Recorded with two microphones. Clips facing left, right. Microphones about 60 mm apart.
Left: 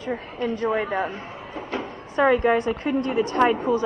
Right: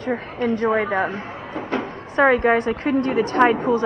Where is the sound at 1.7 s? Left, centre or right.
Right.